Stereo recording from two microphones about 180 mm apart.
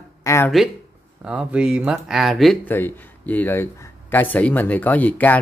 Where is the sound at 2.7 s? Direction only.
10° left (ahead or behind).